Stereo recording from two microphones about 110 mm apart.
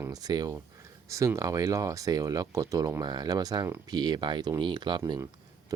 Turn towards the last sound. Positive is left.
turn(degrees=-35)  # may be behind; listen again after turning